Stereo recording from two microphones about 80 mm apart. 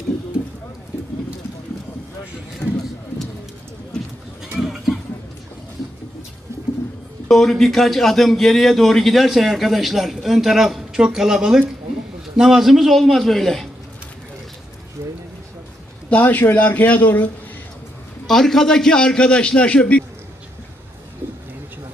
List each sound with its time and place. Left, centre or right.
4.5 s a sound: centre
7.3 s a man's voice: centre
15.0 s speech: right
16.0 s a man's voice: left
18.3 s a man's voice: centre